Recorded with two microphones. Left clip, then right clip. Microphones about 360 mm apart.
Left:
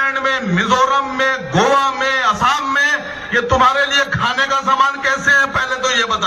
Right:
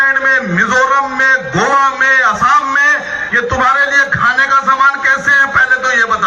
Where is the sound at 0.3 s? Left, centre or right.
Centre.